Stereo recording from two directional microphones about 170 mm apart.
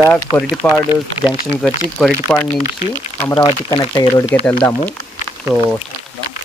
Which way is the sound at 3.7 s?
20° left (ahead or behind).